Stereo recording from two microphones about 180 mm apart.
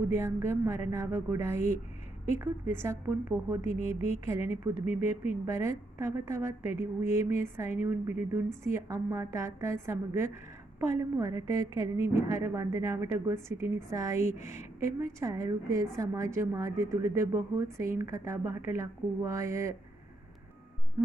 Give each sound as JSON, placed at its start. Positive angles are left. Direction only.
{"t": 0.1, "sound": "a woman's voice", "side_deg": -15}